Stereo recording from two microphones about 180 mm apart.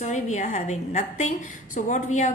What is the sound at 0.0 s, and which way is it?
A woman's voice, 40° left (ahead or behind).